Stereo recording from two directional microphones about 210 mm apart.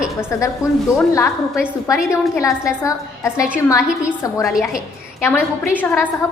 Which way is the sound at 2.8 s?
15° left (ahead or behind).